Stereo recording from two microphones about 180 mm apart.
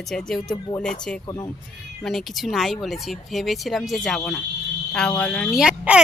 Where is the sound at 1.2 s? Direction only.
20° left (ahead or behind).